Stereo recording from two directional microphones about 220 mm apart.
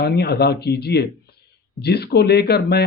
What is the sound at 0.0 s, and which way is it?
A man's voice, 50° left (ahead or behind).